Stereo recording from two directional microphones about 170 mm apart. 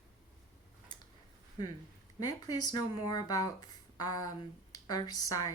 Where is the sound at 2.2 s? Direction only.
20° left (ahead or behind).